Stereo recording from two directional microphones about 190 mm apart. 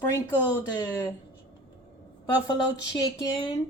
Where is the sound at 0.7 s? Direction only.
20° left (ahead or behind).